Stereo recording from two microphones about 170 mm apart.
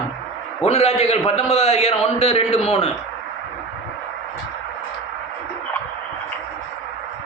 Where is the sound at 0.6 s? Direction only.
40° left (ahead or behind).